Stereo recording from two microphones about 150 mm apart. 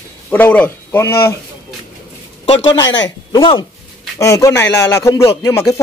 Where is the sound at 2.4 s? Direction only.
30° left (ahead or behind).